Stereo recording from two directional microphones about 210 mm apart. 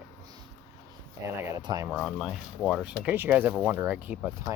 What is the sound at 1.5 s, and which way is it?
Speech, 15° right (ahead or behind).